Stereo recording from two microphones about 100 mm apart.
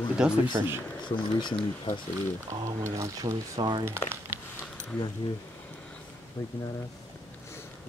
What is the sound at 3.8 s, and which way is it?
Speech, 25° right (ahead or behind).